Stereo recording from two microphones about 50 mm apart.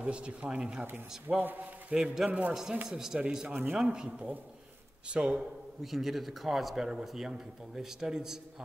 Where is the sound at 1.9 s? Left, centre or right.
Centre.